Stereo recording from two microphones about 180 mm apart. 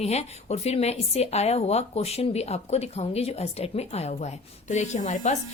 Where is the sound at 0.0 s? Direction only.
35° left (ahead or behind).